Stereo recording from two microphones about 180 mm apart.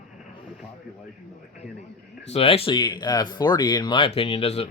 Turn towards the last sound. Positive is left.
turn(degrees=35)  # may be behind; listen again after turning